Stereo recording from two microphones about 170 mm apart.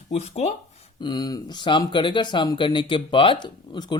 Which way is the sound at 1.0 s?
25° left (ahead or behind).